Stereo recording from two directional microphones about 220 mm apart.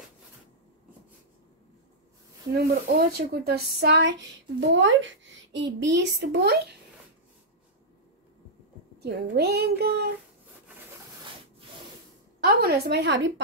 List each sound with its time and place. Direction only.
2.5 s a woman's voice: 45° right (ahead or behind)
9.0 s a woman's voice: 45° right (ahead or behind)
12.4 s a woman's voice: 45° right (ahead or behind)